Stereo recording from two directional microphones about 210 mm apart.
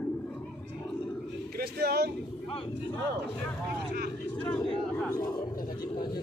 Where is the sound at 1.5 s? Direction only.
50° right (ahead or behind).